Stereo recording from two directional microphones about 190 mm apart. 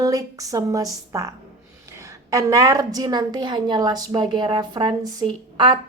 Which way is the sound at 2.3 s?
15° right (ahead or behind).